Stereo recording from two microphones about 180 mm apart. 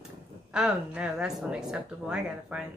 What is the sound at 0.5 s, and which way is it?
Speech, 5° right (ahead or behind).